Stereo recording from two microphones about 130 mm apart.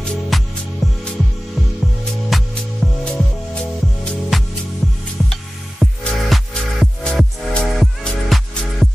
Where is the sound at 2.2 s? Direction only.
Centre (ahead or behind).